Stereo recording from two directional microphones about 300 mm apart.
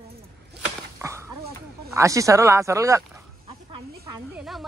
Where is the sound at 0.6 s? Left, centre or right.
Centre.